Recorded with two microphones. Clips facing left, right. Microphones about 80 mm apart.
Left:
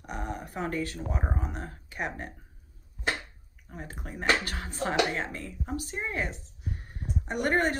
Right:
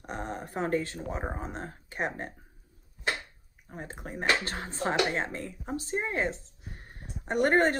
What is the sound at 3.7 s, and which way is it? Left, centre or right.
Speech, right.